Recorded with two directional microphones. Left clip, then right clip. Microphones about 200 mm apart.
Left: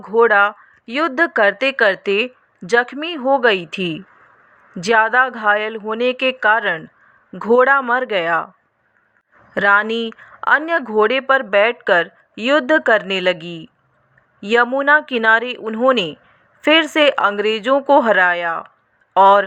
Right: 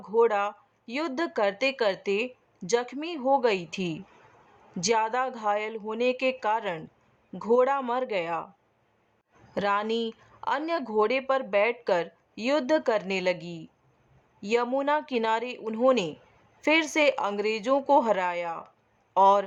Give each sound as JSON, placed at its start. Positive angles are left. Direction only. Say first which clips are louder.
{"t": 0.0, "sound": "speech", "louder": "left 11 dB", "side_deg": 10}
{"t": 9.6, "sound": "speech", "louder": "left 12 dB", "side_deg": 10}